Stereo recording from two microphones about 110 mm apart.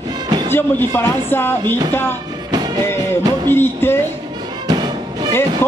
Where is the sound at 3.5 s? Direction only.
20° left (ahead or behind).